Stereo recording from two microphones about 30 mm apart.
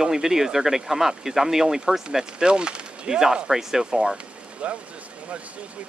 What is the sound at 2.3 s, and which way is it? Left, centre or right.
Speech, right.